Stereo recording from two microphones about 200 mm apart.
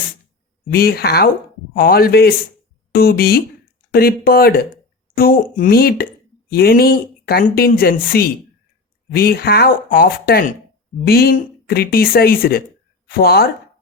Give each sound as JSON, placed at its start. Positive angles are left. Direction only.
{"t": 0.7, "sound": "speech", "side_deg": 50}